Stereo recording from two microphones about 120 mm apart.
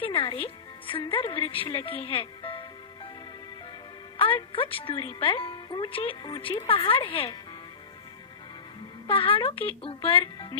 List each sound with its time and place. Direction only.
0.0 s a woman's voice: 50° left (ahead or behind)
4.2 s speech: 50° left (ahead or behind)
9.0 s speech: 50° left (ahead or behind)